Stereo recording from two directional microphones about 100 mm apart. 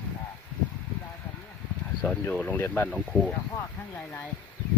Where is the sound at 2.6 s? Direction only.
20° left (ahead or behind).